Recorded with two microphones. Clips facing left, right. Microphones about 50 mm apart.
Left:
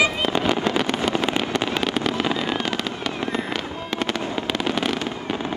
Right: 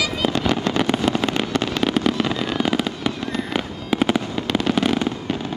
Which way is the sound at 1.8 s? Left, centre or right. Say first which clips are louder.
Right 2 dB; centre.